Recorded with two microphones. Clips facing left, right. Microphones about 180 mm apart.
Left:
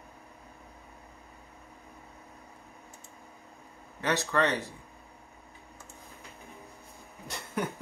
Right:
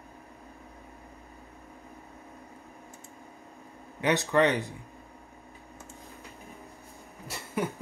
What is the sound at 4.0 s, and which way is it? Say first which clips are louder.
Speech: right 4 dB; 15° right (ahead or behind).